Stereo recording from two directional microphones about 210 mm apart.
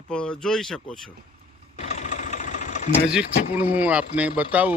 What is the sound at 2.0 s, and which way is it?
Engine, 35° left (ahead or behind).